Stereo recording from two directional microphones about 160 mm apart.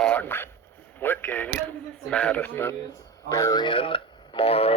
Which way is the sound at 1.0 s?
10° left (ahead or behind).